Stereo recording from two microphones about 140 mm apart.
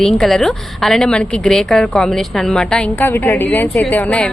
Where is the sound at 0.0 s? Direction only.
5° left (ahead or behind).